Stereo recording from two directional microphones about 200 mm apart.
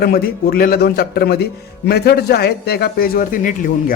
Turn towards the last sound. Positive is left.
turn(degrees=45)  # may be behind; listen again after turning